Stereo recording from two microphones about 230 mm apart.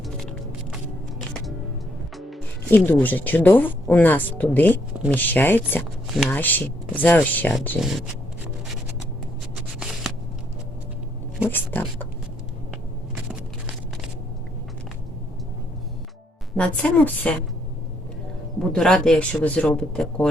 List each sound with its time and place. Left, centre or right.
2.1 s speech: centre
11.4 s speech: centre
16.6 s speech: centre
18.7 s speech: centre